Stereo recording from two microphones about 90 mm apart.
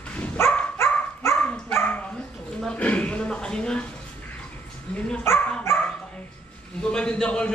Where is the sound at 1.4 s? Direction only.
15° left (ahead or behind).